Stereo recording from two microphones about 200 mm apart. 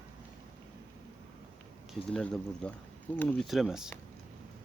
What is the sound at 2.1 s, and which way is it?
Speech, 5° left (ahead or behind).